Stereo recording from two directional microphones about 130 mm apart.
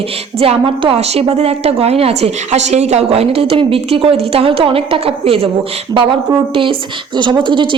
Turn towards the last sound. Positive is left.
turn(degrees=-40)  # may be behind; listen again after turning